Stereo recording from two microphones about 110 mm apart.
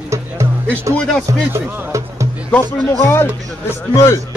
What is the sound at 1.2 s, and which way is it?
Speech, 30° right (ahead or behind).